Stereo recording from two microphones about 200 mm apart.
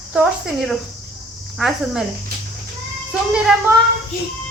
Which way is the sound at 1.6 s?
Centre (ahead or behind).